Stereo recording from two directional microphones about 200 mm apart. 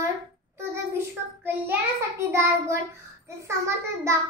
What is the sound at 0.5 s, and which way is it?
Child singing, 10° right (ahead or behind).